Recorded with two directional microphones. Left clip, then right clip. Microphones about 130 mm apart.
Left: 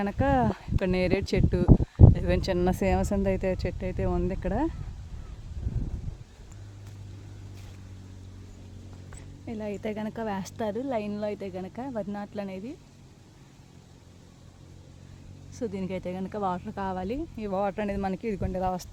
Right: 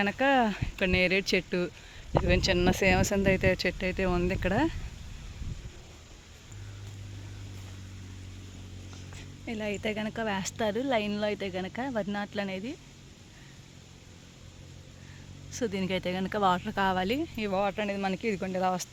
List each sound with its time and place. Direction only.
0.0 s speech: 25° left (ahead or behind)
2.5 s speech: 25° left (ahead or behind); by 4.7 s 5° left (ahead or behind)
9.5 s speech: 20° left (ahead or behind)
10.8 s speech: 5° left (ahead or behind)
15.5 s speech: 5° left (ahead or behind)
17.5 s speech: 30° left (ahead or behind)
18.1 s speech: 15° left (ahead or behind)